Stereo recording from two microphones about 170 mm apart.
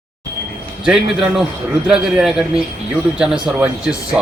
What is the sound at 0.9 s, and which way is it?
Speech, 5° right (ahead or behind).